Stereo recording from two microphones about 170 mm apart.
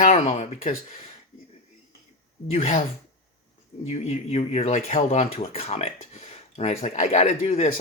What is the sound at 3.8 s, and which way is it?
Speech, 45° left (ahead or behind).